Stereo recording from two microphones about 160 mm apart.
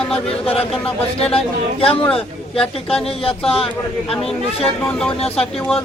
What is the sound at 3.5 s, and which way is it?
Speech, 35° left (ahead or behind).